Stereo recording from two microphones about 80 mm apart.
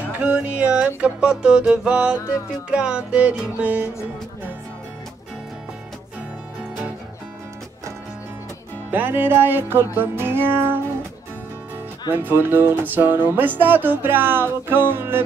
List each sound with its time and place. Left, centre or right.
0.2 s music: centre
8.9 s music: right
12.1 s music: right